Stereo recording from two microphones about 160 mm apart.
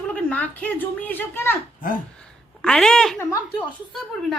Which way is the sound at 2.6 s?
5° left (ahead or behind).